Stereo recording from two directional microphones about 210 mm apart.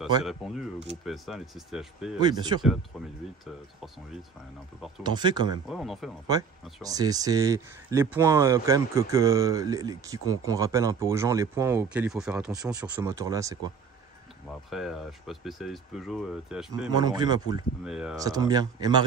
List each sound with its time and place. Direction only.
0.2 s speech: centre (ahead or behind)
2.1 s speech: 20° right (ahead or behind)
2.9 s speech: centre (ahead or behind)
5.0 s speech: 20° right (ahead or behind)
5.7 s speech: centre (ahead or behind)
6.8 s speech: 15° right (ahead or behind)
14.7 s speech: centre (ahead or behind)
16.9 s speech: 20° right (ahead or behind)
17.8 s speech: 5° right (ahead or behind)
18.1 s speech: 15° right (ahead or behind)